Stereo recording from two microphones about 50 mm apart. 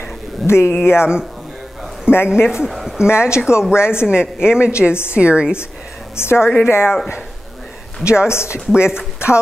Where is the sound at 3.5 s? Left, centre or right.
Left.